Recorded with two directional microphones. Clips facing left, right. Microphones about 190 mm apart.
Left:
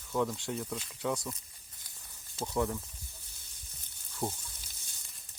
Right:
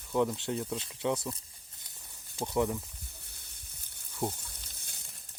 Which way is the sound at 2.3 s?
15° right (ahead or behind).